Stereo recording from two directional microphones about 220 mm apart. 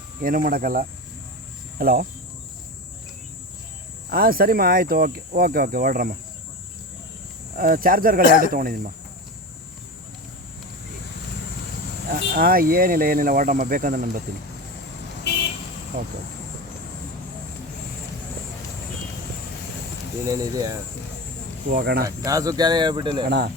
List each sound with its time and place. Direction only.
0.2 s speech: 40° right (ahead or behind)
4.1 s speech: 40° right (ahead or behind)
7.5 s speech: 40° right (ahead or behind)
8.2 s speech: 35° left (ahead or behind)
8.5 s speech: 40° right (ahead or behind)
12.1 s speech: 40° right (ahead or behind)
15.3 s vehicle: 50° left (ahead or behind)
20.2 s speech: 15° right (ahead or behind)
21.7 s speech: 40° right (ahead or behind)
22.0 s speech: 15° right (ahead or behind)
23.2 s speech: 50° right (ahead or behind)